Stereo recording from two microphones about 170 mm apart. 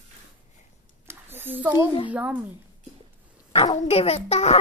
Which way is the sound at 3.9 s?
35° left (ahead or behind).